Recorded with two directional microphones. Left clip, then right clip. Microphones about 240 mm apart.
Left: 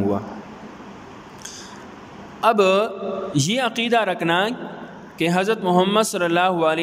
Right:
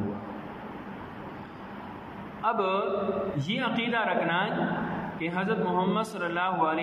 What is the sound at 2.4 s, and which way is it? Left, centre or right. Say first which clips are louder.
A man's voice: left 10 dB; left.